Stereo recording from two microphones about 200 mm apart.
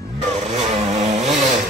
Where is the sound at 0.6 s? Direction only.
35° right (ahead or behind).